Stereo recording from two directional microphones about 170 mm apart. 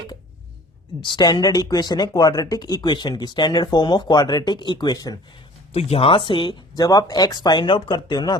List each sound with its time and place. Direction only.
1.0 s speech: 25° left (ahead or behind)
5.7 s speech: 35° left (ahead or behind)